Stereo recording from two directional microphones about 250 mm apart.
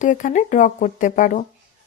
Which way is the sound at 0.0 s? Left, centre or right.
Left.